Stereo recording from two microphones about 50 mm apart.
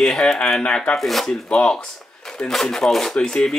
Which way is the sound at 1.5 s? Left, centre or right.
Centre.